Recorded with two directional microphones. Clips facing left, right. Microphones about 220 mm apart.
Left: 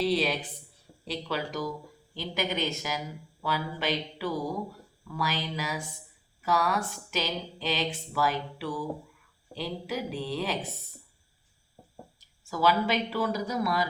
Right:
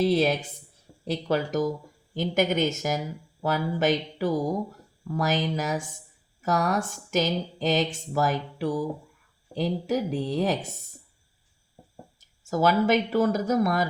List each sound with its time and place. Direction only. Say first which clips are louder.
0.0 s speech: right 5 dB; 45° right (ahead or behind)
12.2 s speech: right 3 dB; 45° right (ahead or behind)